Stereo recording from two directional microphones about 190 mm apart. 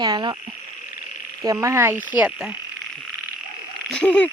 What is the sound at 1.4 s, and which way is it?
Frog, 15° right (ahead or behind).